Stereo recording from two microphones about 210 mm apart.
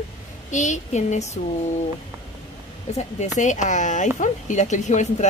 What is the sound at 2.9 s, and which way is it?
Speech, 35° left (ahead or behind).